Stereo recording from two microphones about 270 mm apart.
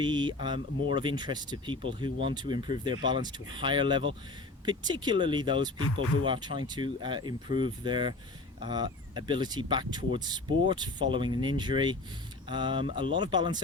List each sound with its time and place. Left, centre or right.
0.0 s speech: centre
5.7 s speech: left
6.2 s speech: centre